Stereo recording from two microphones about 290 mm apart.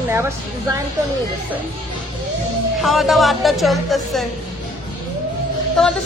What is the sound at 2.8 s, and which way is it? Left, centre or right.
Music, centre.